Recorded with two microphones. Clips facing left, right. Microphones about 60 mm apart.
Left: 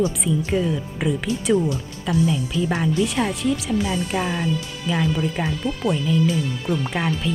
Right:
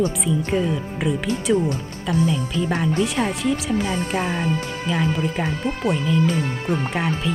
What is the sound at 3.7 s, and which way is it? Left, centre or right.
Speech, right.